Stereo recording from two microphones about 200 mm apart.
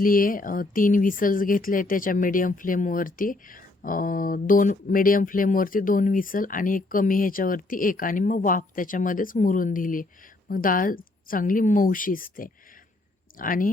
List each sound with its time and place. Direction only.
0.0 s speech: 45° left (ahead or behind)